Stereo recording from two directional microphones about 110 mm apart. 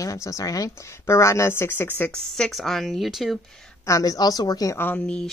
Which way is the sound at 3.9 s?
30° left (ahead or behind).